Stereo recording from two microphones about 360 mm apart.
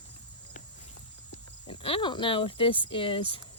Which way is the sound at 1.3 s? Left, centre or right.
Centre.